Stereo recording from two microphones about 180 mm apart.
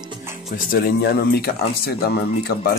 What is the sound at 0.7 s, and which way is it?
Speech, 55° left (ahead or behind).